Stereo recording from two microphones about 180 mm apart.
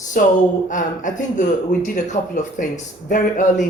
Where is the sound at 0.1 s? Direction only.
50° left (ahead or behind).